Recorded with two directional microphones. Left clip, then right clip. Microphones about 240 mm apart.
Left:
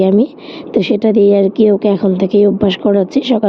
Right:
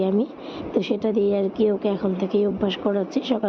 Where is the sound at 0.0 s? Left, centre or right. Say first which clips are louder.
Left 11 dB; left.